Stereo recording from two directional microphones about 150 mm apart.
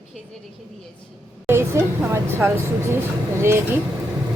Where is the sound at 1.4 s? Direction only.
15° right (ahead or behind).